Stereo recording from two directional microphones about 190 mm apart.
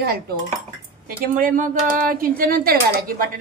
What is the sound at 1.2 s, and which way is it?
Speech, 45° right (ahead or behind).